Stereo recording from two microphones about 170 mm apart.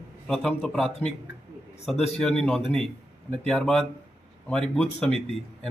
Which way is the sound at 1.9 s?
40° left (ahead or behind).